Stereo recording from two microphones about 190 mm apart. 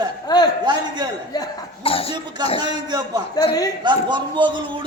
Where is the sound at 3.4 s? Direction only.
20° left (ahead or behind).